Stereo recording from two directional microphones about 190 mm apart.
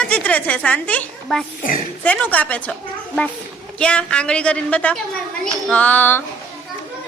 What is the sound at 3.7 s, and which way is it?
A woman's voice, 5° left (ahead or behind).